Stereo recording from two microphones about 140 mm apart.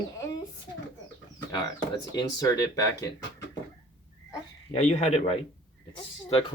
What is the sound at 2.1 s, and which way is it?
Speech, 25° left (ahead or behind).